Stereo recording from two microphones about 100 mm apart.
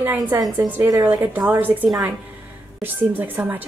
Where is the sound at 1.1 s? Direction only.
15° right (ahead or behind).